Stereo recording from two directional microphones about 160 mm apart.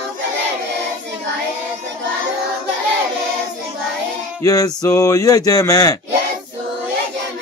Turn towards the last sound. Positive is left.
turn(degrees=20)  # may be behind; listen again after turning